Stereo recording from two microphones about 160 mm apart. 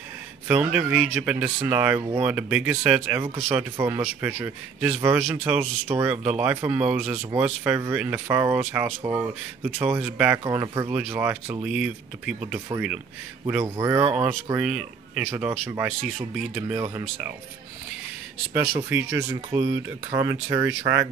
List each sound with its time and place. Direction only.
0.5 s speech: 10° right (ahead or behind)
2.0 s speech: 35° right (ahead or behind)
2.2 s speech: 10° right (ahead or behind)
10.4 s speech: 20° right (ahead or behind); by 12.4 s 5° right (ahead or behind)
12.5 s speech: 15° right (ahead or behind)
16.5 s speech: 15° right (ahead or behind)
18.9 s speech: 90° right
19.7 s speech: 20° right (ahead or behind)